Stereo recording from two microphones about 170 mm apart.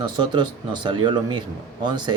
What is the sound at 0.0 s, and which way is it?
Speech, 25° right (ahead or behind).